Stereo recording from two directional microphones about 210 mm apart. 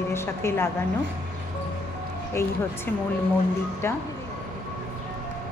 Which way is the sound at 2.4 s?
10° left (ahead or behind).